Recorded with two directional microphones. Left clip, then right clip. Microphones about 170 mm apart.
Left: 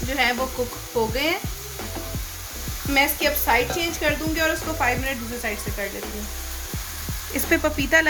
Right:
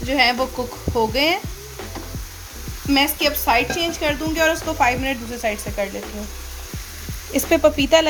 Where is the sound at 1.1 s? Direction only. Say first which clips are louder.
Right 7 dB; 60° right (ahead or behind).